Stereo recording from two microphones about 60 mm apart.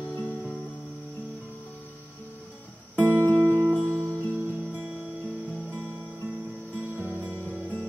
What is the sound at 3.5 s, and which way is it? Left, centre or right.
Music, right.